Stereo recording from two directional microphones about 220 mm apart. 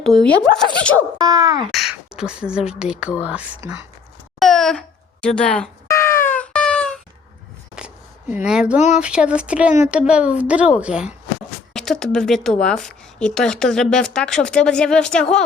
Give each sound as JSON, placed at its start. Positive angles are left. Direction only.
{"t": 0.1, "sound": "a woman's voice", "side_deg": 5}
{"t": 1.2, "sound": "speech", "side_deg": -15}
{"t": 1.7, "sound": "a woman's voice", "side_deg": 0}
{"t": 4.4, "sound": "wail", "side_deg": 0}
{"t": 5.2, "sound": "cat", "side_deg": 5}
{"t": 6.2, "sound": "wail", "side_deg": 5}
{"t": 8.4, "sound": "a woman's voice", "side_deg": -5}